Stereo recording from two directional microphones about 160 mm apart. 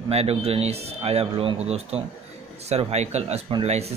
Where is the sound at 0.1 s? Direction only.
40° right (ahead or behind).